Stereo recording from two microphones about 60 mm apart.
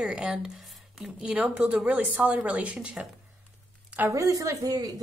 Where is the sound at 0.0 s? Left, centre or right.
Centre.